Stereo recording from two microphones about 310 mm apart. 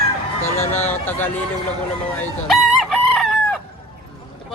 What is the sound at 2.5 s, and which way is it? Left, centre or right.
Chicken, centre.